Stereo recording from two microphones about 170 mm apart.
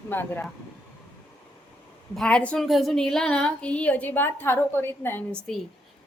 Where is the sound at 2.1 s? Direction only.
5° left (ahead or behind).